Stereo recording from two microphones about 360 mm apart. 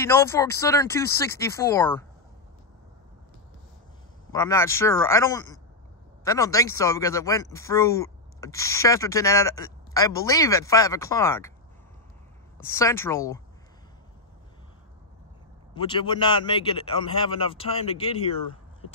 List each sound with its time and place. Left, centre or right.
0.0 s speech: centre
4.3 s speech: centre
12.5 s speech: centre
15.7 s speech: centre